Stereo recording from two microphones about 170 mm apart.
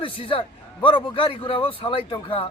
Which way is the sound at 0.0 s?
30° left (ahead or behind).